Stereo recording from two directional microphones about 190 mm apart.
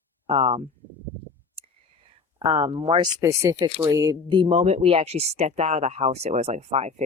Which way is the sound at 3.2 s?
15° right (ahead or behind).